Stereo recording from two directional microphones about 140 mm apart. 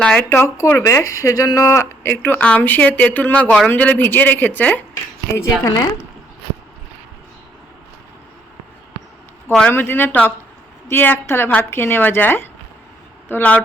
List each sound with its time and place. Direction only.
0.0 s speech: 5° left (ahead or behind)
0.3 s speech: 20° left (ahead or behind)
9.5 s speech: 10° left (ahead or behind)